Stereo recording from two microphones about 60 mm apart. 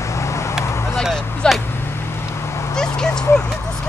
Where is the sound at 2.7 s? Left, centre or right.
Centre.